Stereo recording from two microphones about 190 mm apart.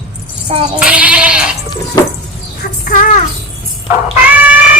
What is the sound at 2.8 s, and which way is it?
Music, 45° left (ahead or behind).